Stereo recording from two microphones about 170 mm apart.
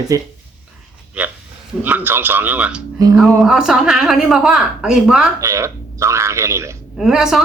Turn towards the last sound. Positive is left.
turn(degrees=-5)  # may be behind; listen again after turning